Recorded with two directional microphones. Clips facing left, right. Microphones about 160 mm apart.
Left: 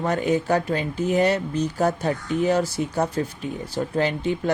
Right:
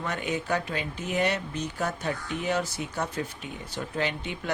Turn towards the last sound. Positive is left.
turn(degrees=35)  # may be behind; listen again after turning